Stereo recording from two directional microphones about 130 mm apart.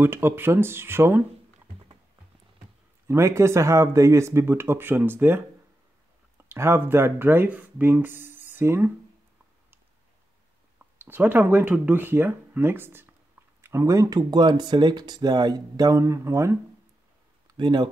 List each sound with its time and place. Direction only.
0.0 s speech: 15° right (ahead or behind)
3.1 s speech: 20° right (ahead or behind)
6.5 s speech: 20° right (ahead or behind)
11.0 s speech: 15° right (ahead or behind)
17.6 s speech: 35° right (ahead or behind)